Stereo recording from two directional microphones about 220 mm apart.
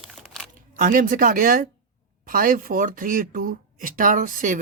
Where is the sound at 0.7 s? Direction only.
40° right (ahead or behind).